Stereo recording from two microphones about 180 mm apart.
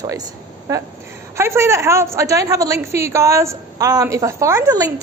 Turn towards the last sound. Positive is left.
turn(degrees=-20)  # may be behind; listen again after turning